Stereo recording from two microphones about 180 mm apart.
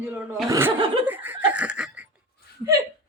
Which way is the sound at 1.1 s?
10° right (ahead or behind).